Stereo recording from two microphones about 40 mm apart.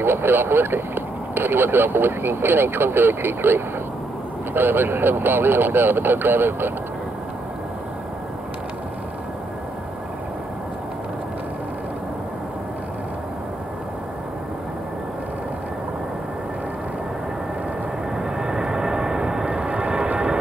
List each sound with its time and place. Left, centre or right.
0.0 s speech: right
18.1 s vehicle: centre